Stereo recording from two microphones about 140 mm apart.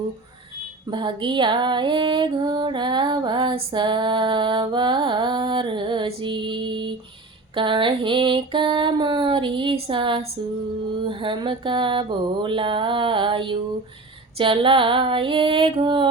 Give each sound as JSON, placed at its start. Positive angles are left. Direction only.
{"t": 0.9, "sound": "music", "side_deg": -35}